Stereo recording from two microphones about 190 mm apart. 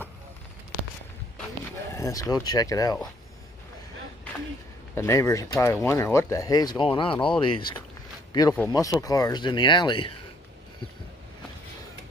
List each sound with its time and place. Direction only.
2.0 s speech: 15° left (ahead or behind)
4.9 s speech: 15° left (ahead or behind)